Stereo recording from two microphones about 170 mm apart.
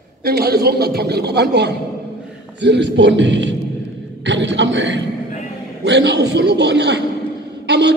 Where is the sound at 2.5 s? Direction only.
90° right.